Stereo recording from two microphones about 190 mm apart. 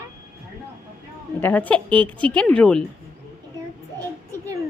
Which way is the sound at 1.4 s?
10° left (ahead or behind).